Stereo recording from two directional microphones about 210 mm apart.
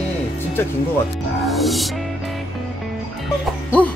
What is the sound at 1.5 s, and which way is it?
Music, centre (ahead or behind).